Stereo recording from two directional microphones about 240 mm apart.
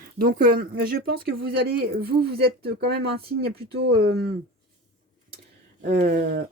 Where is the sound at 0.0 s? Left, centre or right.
Right.